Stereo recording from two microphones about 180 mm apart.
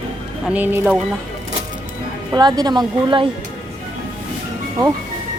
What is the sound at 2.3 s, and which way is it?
Speech, 20° right (ahead or behind).